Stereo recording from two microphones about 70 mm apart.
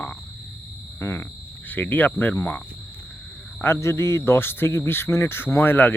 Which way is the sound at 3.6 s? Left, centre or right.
Left.